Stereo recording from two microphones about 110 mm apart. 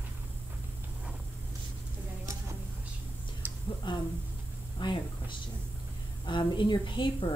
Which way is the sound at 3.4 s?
15° right (ahead or behind).